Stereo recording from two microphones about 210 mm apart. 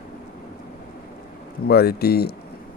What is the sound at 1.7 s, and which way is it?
Speech, 50° left (ahead or behind).